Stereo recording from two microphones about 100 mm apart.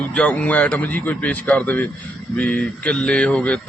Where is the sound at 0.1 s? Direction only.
10° left (ahead or behind).